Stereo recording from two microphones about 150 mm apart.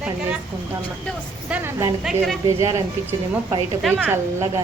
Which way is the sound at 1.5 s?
10° right (ahead or behind).